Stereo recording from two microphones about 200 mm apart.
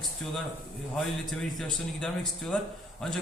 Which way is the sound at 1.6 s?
Centre (ahead or behind).